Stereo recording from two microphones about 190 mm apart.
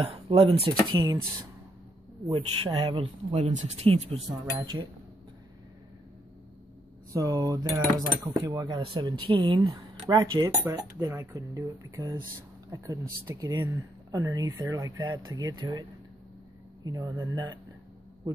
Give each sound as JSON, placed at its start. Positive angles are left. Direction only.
{"t": 0.0, "sound": "speech", "side_deg": -30}
{"t": 2.3, "sound": "speech", "side_deg": -25}
{"t": 4.3, "sound": "speech", "side_deg": -20}
{"t": 7.1, "sound": "speech", "side_deg": -20}